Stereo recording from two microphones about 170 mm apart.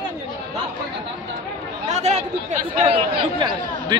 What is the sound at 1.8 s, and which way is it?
A man's voice, 40° right (ahead or behind).